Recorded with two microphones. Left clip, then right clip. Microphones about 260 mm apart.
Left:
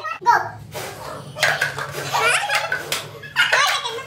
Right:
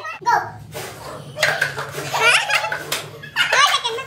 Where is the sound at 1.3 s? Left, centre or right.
Centre.